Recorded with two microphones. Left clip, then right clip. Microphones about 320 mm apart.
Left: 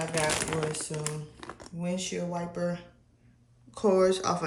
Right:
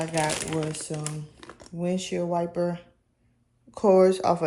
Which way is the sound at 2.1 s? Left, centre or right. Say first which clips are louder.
Right 7 dB; centre.